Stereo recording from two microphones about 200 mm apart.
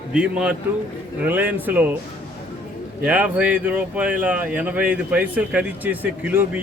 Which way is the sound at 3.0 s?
5° right (ahead or behind).